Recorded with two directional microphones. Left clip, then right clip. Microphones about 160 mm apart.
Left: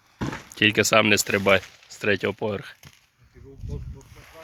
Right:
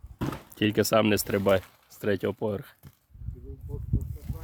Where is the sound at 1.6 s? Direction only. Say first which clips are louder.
Left 9 dB; 90° right.